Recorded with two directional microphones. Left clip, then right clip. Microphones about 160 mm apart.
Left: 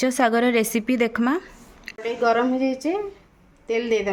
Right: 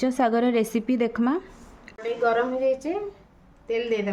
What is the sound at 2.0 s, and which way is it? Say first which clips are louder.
Speech: left 3 dB; 45° left (ahead or behind).